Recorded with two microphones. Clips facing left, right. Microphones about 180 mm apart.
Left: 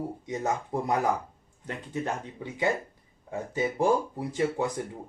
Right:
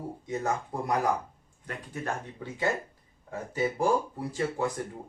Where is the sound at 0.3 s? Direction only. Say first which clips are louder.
Even; 20° left (ahead or behind).